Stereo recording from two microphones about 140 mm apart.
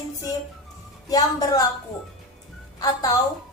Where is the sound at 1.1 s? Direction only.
25° left (ahead or behind).